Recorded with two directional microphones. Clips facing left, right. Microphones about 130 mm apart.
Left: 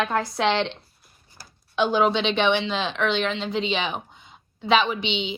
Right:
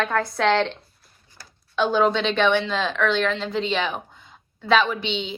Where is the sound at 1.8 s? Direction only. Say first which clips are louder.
Right 1 dB; 20° left (ahead or behind).